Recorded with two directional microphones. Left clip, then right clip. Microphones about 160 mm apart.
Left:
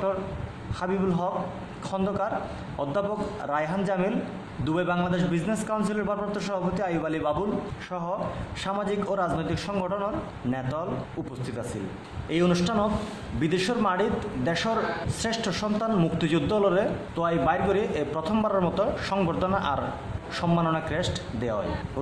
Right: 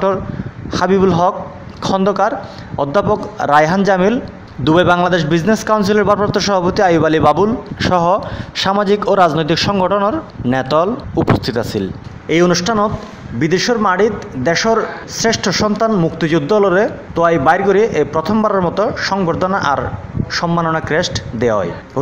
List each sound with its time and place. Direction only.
0.7 s a man's voice: 50° right (ahead or behind)
12.3 s a man's voice: 40° right (ahead or behind)